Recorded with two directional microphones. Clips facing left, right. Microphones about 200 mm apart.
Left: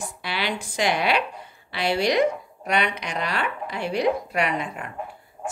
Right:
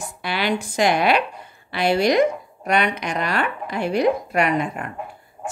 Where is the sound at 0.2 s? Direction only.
50° right (ahead or behind).